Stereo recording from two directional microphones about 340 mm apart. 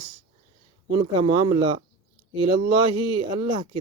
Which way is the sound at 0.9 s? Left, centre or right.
Centre.